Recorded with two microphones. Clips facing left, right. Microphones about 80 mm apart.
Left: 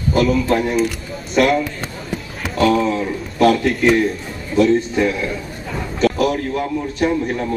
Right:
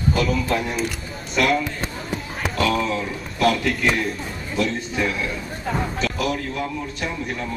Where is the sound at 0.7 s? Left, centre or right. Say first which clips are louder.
Left 7 dB; centre.